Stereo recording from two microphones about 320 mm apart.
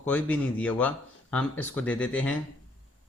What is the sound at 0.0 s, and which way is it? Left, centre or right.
Speech, centre.